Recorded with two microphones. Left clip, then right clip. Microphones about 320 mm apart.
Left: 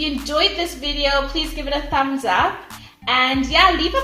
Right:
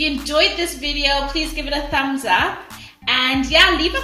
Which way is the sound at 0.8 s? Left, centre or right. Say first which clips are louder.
Even; left.